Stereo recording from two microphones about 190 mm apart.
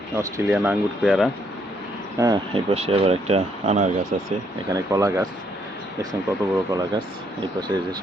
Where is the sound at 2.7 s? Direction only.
30° right (ahead or behind).